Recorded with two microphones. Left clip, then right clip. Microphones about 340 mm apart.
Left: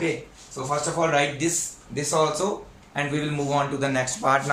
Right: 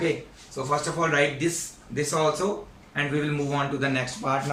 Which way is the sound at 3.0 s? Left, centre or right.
Centre.